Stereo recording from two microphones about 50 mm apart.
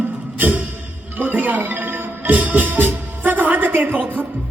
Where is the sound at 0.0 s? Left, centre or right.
Right.